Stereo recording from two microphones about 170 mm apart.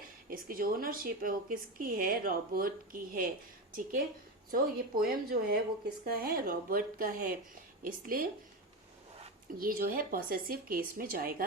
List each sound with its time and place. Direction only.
0.3 s a woman's voice: 60° right (ahead or behind)
9.6 s a woman's voice: 55° right (ahead or behind)